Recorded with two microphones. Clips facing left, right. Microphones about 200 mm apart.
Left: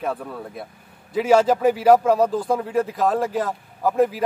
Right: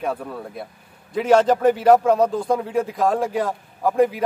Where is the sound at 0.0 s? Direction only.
Centre (ahead or behind).